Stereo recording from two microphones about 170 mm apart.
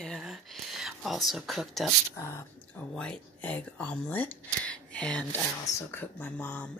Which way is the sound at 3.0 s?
5° left (ahead or behind).